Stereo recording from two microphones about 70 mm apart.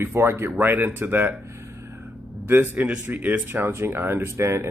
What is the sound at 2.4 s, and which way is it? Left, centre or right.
A man's voice, right.